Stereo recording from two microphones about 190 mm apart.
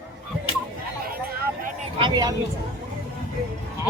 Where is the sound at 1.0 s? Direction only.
50° right (ahead or behind).